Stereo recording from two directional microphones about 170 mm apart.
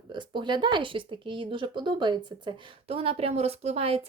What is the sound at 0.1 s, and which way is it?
Speech, 25° right (ahead or behind).